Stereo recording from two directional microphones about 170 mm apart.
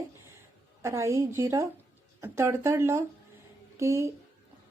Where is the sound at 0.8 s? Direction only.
15° right (ahead or behind).